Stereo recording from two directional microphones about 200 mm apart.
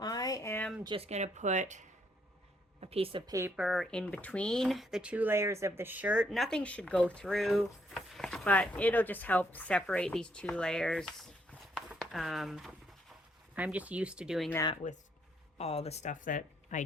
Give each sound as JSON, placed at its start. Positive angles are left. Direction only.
{"t": 0.0, "sound": "a sound", "side_deg": 20}
{"t": 0.9, "sound": "speech", "side_deg": -30}
{"t": 2.8, "sound": "speech", "side_deg": -30}
{"t": 11.7, "sound": "a sound", "side_deg": 0}
{"t": 13.6, "sound": "speech", "side_deg": -5}
{"t": 14.5, "sound": "speech", "side_deg": 20}
{"t": 15.5, "sound": "speech", "side_deg": 30}